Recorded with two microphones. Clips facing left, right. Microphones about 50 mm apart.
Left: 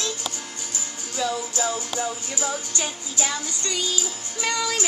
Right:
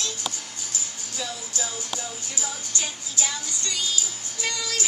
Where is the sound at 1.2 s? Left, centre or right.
Left.